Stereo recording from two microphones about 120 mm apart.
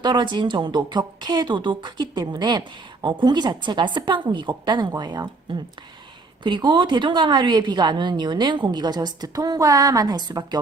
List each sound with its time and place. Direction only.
0.0 s speech: 40° right (ahead or behind)